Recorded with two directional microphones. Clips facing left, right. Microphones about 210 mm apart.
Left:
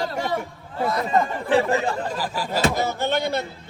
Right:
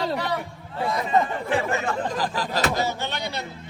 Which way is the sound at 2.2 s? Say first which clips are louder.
Even; 10° left (ahead or behind).